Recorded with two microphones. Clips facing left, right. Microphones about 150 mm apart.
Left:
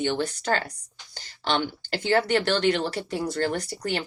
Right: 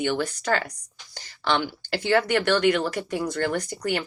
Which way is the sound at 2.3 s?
30° left (ahead or behind).